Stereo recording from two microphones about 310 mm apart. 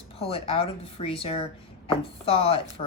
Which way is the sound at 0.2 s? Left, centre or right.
Centre.